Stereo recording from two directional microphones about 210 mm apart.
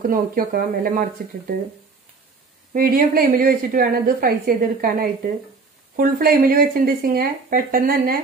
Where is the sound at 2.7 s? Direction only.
45° right (ahead or behind).